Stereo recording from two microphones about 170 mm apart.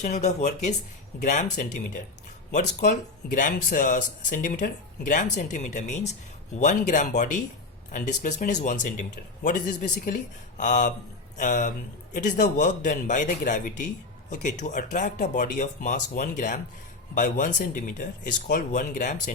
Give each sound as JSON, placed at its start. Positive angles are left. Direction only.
{"t": 0.0, "sound": "speech", "side_deg": 45}
{"t": 3.3, "sound": "speech", "side_deg": 50}